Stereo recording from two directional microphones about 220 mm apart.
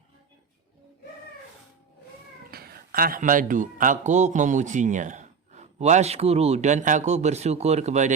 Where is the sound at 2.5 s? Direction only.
45° right (ahead or behind).